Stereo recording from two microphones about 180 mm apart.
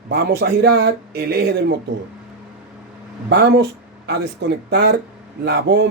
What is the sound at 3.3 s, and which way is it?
Speech, 70° right (ahead or behind).